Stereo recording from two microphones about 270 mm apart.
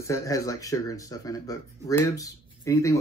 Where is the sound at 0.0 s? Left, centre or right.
Centre.